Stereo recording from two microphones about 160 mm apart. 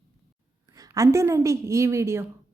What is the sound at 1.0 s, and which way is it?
A woman's voice, 20° right (ahead or behind).